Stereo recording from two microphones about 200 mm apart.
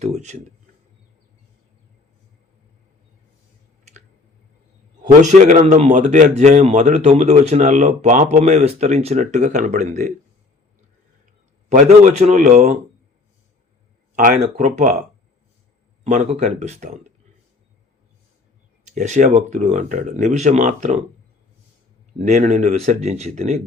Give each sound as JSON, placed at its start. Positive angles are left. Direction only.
{"t": 0.0, "sound": "speech", "side_deg": -35}
{"t": 5.2, "sound": "speech", "side_deg": -35}
{"t": 11.7, "sound": "speech", "side_deg": -35}
{"t": 14.2, "sound": "speech", "side_deg": -40}
{"t": 16.0, "sound": "speech", "side_deg": -35}
{"t": 18.9, "sound": "speech", "side_deg": -35}
{"t": 22.2, "sound": "speech", "side_deg": -35}